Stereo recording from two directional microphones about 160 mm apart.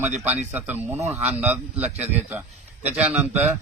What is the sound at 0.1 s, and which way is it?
A man's voice, 10° right (ahead or behind).